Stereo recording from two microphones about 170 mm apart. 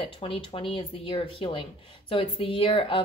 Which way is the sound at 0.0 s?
30° left (ahead or behind).